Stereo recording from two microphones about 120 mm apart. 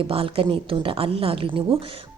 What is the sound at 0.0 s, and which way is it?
A woman's voice, 50° right (ahead or behind).